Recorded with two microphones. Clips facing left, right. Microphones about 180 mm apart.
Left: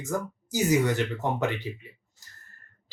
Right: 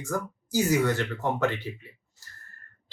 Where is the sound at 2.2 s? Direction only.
15° left (ahead or behind).